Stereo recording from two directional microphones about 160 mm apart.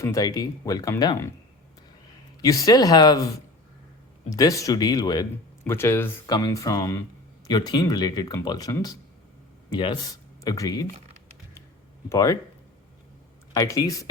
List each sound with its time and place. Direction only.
0.0 s speech: 20° left (ahead or behind)
2.4 s speech: 20° left (ahead or behind)
4.3 s speech: 20° left (ahead or behind)
12.0 s speech: 20° left (ahead or behind)
13.5 s speech: 20° left (ahead or behind)